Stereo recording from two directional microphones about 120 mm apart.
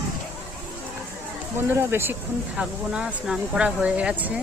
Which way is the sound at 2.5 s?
5° right (ahead or behind).